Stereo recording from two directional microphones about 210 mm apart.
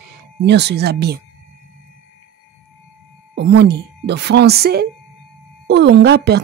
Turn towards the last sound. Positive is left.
turn(degrees=-50)  # may be behind; listen again after turning